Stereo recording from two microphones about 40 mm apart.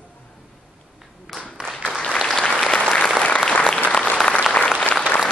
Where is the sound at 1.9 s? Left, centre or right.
Centre.